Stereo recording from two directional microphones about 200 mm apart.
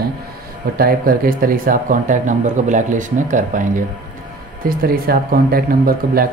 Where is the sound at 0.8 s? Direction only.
45° right (ahead or behind).